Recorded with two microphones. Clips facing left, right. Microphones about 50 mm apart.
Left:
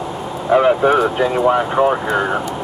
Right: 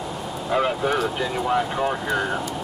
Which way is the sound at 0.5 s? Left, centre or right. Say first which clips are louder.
Left 10 dB; left.